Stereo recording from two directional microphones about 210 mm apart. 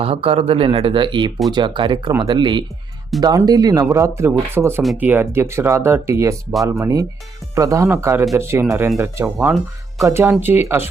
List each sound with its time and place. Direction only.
0.0 s speech: 25° right (ahead or behind); by 10.8 s 10° right (ahead or behind)